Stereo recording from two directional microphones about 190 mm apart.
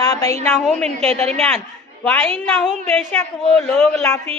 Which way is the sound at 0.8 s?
35° right (ahead or behind).